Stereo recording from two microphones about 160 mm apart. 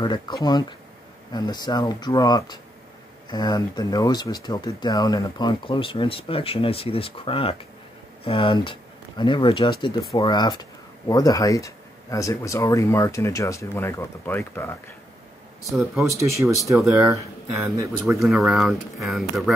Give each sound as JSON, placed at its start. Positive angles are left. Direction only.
{"t": 0.0, "sound": "speech", "side_deg": 25}
{"t": 16.4, "sound": "speech", "side_deg": -10}
{"t": 18.2, "sound": "speech", "side_deg": 0}